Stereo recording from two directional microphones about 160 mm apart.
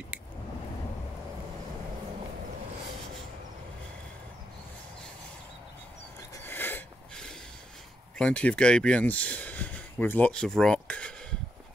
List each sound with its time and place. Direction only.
6.4 s snort: 10° left (ahead or behind)
8.2 s speech: 5° left (ahead or behind)